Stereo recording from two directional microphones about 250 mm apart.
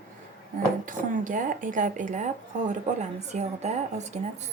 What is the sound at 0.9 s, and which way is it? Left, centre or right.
Speech, right.